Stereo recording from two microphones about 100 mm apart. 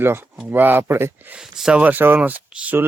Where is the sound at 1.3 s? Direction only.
10° right (ahead or behind).